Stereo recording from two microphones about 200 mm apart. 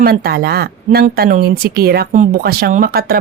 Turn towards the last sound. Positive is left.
turn(degrees=-50)  # may be behind; listen again after turning